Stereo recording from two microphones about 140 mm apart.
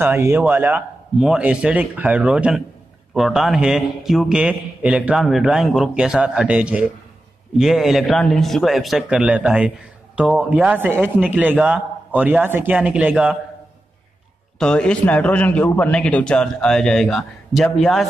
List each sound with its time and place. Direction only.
0.0 s a man's voice: 15° right (ahead or behind)
14.6 s a man's voice: 5° left (ahead or behind)